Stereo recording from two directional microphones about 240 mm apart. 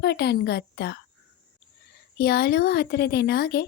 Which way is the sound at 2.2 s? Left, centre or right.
Left.